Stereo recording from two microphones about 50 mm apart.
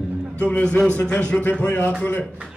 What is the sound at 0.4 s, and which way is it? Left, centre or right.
A man's voice, left.